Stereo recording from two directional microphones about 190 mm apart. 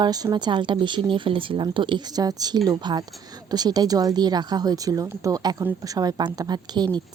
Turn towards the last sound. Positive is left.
turn(degrees=-20)  # may be behind; listen again after turning